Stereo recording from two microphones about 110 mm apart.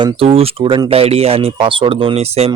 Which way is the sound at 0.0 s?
60° right (ahead or behind).